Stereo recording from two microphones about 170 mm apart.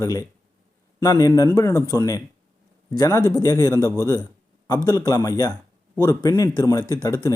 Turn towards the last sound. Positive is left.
turn(degrees=25)  # may be behind; listen again after turning